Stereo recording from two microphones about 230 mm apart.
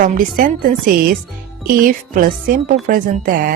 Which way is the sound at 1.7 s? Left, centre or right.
Right.